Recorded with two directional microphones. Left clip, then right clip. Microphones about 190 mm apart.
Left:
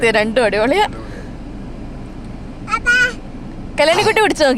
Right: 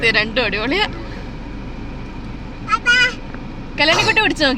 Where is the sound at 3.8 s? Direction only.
50° left (ahead or behind).